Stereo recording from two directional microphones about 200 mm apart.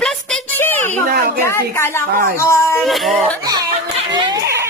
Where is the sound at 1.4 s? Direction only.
10° left (ahead or behind).